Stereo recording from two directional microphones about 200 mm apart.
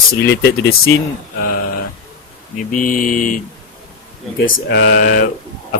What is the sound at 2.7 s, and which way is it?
Speech, 40° left (ahead or behind).